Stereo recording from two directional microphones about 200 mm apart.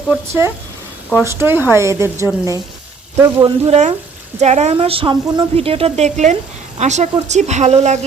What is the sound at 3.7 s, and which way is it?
Speech, 35° right (ahead or behind).